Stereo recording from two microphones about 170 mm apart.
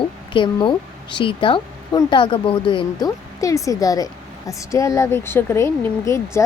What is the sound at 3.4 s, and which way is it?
A woman's voice, 20° left (ahead or behind).